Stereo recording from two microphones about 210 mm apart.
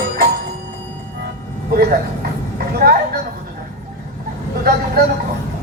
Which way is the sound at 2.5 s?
45° right (ahead or behind).